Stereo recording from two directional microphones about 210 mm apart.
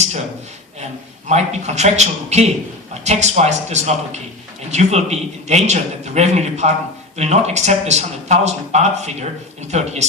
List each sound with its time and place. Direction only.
1.3 s a man's voice: 30° right (ahead or behind)